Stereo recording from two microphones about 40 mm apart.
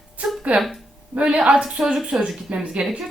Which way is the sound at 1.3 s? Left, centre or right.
Right.